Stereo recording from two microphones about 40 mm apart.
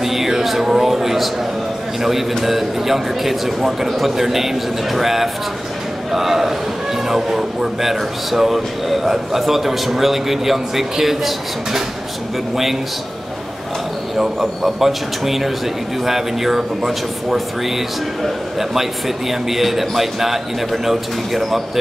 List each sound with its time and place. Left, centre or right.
0.0 s music: centre
2.0 s speech: centre
14.1 s speech: centre